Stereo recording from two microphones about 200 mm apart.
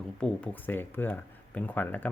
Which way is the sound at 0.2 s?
5° left (ahead or behind).